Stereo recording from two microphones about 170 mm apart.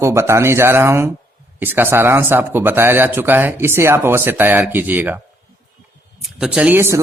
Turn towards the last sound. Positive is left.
turn(degrees=-15)  # may be behind; listen again after turning